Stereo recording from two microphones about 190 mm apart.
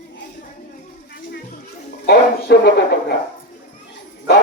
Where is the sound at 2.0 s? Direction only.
55° left (ahead or behind).